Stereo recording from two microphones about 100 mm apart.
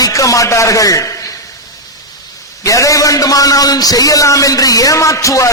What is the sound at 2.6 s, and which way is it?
A man's voice, 35° left (ahead or behind).